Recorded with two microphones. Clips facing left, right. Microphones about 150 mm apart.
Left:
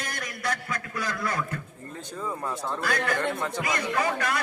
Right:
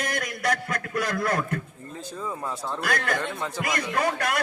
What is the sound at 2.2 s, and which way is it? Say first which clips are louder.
Speech: left 1 dB; 5° right (ahead or behind).